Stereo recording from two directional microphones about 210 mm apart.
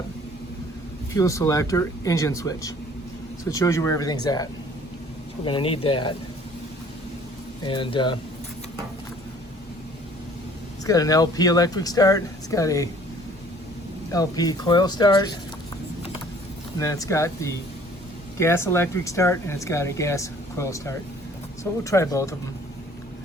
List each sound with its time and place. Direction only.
1.1 s speech: 15° left (ahead or behind)
5.5 s speech: 25° left (ahead or behind)
7.6 s speech: 20° left (ahead or behind)
10.8 s speech: 15° left (ahead or behind)
14.1 s speech: 15° left (ahead or behind)
16.7 s speech: 15° left (ahead or behind)